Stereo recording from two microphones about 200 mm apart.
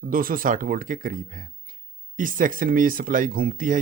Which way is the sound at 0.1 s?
45° right (ahead or behind).